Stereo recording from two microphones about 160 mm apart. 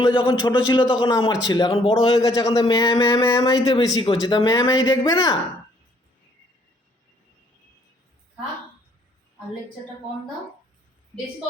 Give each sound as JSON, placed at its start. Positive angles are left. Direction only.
{"t": 0.0, "sound": "a man's voice", "side_deg": 30}
{"t": 2.1, "sound": "a man's voice", "side_deg": 20}
{"t": 2.5, "sound": "a man's voice", "side_deg": 35}